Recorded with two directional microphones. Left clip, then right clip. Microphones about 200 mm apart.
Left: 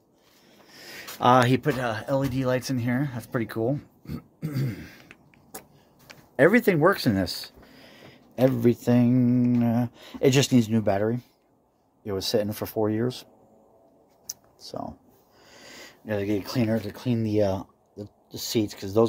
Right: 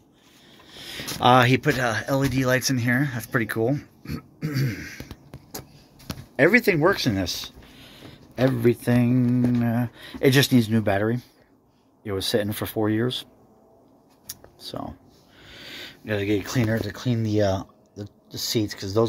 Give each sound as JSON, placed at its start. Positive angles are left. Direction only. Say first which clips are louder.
{"t": 0.8, "sound": "speech", "louder": "right 2 dB", "side_deg": 10}
{"t": 6.3, "sound": "speech", "louder": "right 1 dB", "side_deg": 20}
{"t": 14.7, "sound": "speech", "louder": "right 1 dB", "side_deg": 5}